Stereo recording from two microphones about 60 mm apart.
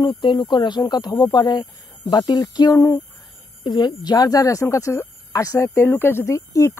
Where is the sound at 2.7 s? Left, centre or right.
Left.